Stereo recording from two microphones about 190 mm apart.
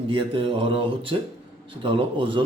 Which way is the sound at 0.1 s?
30° right (ahead or behind).